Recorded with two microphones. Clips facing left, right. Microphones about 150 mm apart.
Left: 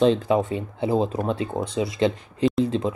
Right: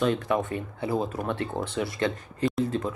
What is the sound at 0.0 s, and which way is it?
Speech, 25° left (ahead or behind).